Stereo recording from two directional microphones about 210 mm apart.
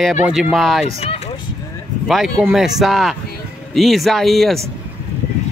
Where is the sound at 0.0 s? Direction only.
Centre (ahead or behind).